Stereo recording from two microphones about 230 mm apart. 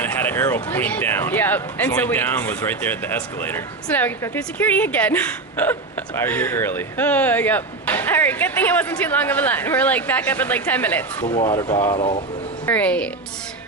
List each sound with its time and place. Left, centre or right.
0.0 s speech: centre
11.3 s speech: centre
12.6 s speech: centre